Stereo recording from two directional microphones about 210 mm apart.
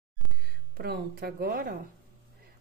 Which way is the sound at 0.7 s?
50° right (ahead or behind).